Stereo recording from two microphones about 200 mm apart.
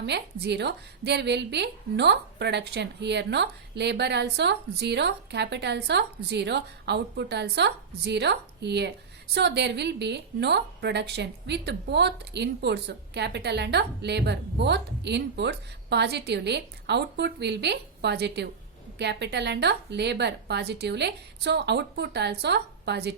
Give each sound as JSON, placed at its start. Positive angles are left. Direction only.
{"t": 0.0, "sound": "a woman's voice", "side_deg": -55}